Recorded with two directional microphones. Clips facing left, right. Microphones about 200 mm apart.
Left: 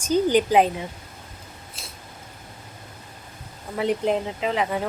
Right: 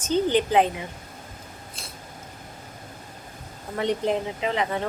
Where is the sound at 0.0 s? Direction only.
10° left (ahead or behind).